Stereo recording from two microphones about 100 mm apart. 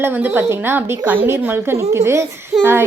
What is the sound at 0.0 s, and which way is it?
A woman's voice, 20° right (ahead or behind).